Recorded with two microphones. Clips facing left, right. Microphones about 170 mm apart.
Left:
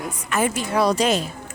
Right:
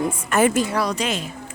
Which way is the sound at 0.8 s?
35° left (ahead or behind).